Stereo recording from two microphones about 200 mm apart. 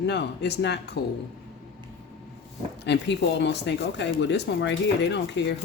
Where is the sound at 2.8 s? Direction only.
60° left (ahead or behind).